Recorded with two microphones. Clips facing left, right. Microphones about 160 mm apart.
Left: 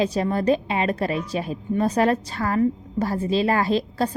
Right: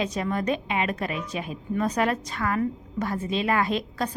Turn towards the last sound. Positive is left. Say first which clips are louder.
# left 4 dB
turn(degrees=30)  # may be behind; listen again after turning